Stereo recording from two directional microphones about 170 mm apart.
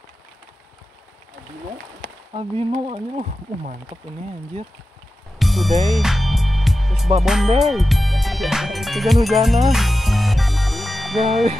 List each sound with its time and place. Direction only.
2.3 s speech: 35° right (ahead or behind)
5.4 s music: centre (ahead or behind)